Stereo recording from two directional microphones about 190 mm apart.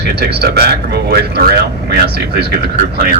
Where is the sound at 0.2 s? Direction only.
60° right (ahead or behind).